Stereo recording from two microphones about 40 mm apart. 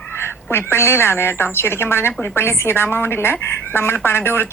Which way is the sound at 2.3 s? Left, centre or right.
Left.